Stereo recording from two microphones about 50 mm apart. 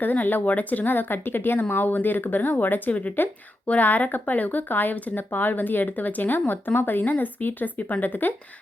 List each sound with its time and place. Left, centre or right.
0.0 s speech: left